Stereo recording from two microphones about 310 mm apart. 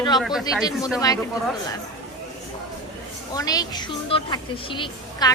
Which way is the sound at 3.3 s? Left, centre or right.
Centre.